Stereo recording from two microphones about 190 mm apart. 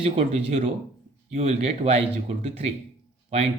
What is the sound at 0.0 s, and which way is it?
Speech, 35° right (ahead or behind).